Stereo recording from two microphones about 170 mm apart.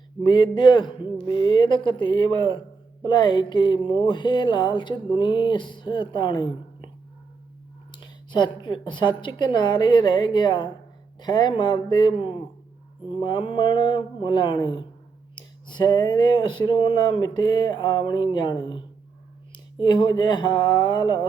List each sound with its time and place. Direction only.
0.2 s speech: 25° left (ahead or behind)
7.9 s speech: 25° left (ahead or behind)